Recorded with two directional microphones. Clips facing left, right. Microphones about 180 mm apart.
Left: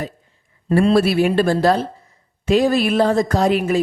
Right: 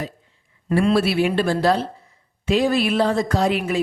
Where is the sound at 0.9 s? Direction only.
45° left (ahead or behind).